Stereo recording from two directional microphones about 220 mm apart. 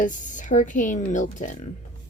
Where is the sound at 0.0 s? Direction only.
35° left (ahead or behind).